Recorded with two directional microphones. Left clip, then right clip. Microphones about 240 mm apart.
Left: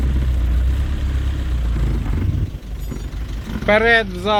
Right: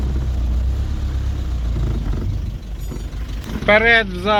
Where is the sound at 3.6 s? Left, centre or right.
Centre.